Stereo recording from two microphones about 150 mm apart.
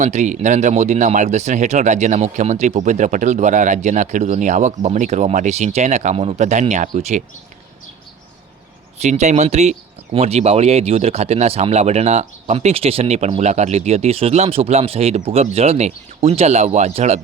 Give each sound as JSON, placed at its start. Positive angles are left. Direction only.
{"t": 0.0, "sound": "speech", "side_deg": -50}
{"t": 9.0, "sound": "speech", "side_deg": -50}